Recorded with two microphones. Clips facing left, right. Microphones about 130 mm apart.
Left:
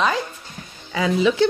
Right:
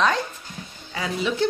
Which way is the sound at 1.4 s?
90° left.